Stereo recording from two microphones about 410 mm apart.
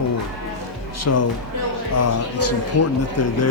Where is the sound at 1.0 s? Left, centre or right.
Left.